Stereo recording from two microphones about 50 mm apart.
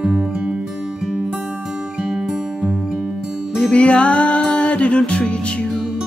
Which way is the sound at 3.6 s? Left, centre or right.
Left.